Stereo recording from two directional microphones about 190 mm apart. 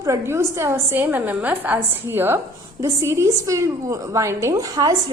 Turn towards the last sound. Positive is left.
turn(degrees=-20)  # may be behind; listen again after turning